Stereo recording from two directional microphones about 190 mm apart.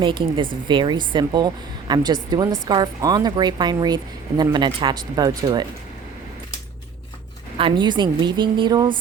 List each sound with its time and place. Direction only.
0.0 s speech: 25° right (ahead or behind)
7.6 s speech: 25° right (ahead or behind)